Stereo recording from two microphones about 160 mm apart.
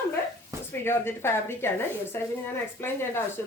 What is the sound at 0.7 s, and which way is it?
Speech, 15° left (ahead or behind).